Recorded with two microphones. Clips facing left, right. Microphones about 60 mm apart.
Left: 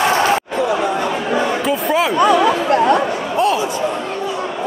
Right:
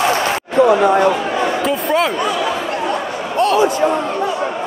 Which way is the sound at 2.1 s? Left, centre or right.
Left.